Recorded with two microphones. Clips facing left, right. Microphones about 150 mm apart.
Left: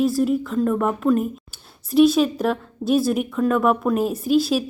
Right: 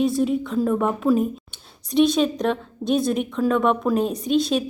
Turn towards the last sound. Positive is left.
turn(degrees=5)  # may be behind; listen again after turning